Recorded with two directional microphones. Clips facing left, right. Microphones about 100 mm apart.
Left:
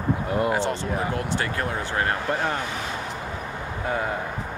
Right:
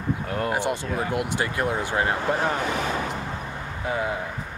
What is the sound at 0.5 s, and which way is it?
Speech, 15° right (ahead or behind).